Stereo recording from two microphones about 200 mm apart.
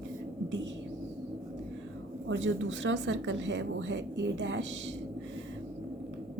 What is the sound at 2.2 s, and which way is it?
Speech, 70° right (ahead or behind).